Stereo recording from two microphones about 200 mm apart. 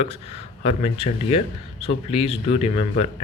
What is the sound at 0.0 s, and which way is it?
Speech, 30° left (ahead or behind).